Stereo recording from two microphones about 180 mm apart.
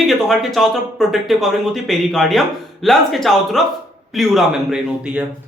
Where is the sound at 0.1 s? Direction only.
Centre (ahead or behind).